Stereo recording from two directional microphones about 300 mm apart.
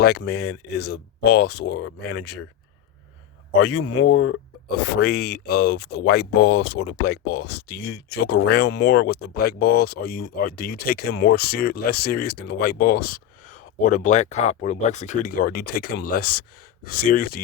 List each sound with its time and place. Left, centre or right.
0.0 s speech: left
3.6 s speech: left